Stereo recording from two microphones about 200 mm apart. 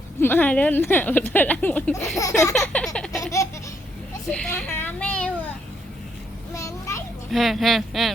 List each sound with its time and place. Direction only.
0.2 s speech: 10° left (ahead or behind)
2.1 s speech: 15° left (ahead or behind)
2.5 s a sound: centre (ahead or behind)
4.3 s speech: 5° left (ahead or behind)
6.5 s a sound: 15° left (ahead or behind)
7.3 s speech: centre (ahead or behind)